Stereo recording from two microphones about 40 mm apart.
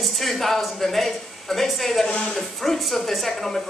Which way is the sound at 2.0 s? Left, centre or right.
Left.